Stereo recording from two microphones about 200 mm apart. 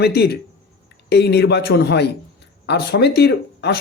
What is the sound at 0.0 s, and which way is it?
Speech, 55° left (ahead or behind).